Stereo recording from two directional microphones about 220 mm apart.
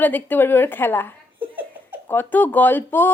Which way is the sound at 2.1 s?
10° left (ahead or behind).